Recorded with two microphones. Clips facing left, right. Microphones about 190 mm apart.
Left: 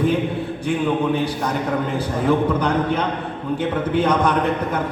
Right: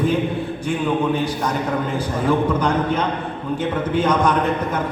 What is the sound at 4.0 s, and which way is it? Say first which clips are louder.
Speech: right 1 dB; 60° left (ahead or behind).